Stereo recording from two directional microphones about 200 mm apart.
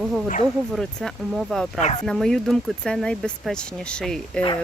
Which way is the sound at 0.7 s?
Centre (ahead or behind).